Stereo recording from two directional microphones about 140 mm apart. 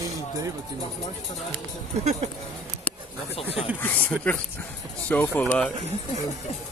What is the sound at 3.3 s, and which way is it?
Speech, 40° left (ahead or behind).